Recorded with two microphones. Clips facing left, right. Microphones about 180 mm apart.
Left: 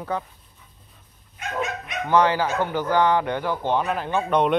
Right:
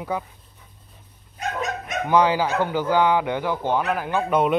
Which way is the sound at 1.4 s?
40° right (ahead or behind).